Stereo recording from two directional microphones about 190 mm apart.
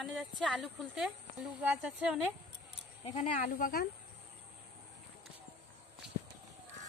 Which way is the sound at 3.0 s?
35° left (ahead or behind).